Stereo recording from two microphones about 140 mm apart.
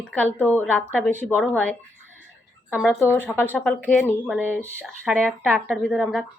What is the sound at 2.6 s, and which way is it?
Speech, 10° right (ahead or behind).